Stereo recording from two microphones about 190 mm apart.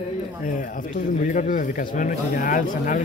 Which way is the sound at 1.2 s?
45° left (ahead or behind).